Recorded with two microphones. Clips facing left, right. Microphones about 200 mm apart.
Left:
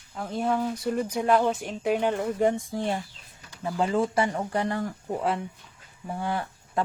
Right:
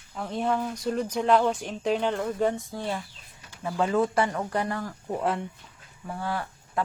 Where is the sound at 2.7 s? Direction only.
25° left (ahead or behind).